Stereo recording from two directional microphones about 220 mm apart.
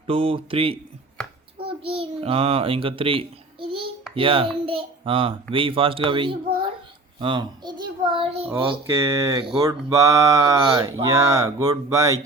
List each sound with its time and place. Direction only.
0.1 s a child's voice: 25° right (ahead or behind)
9.0 s speech: 15° right (ahead or behind)